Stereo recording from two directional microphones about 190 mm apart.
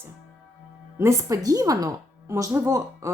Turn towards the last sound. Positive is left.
turn(degrees=-15)  # may be behind; listen again after turning